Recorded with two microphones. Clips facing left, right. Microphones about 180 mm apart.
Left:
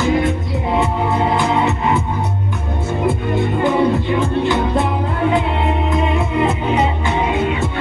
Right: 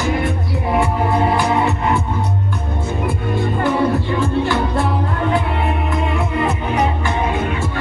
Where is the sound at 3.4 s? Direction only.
20° left (ahead or behind).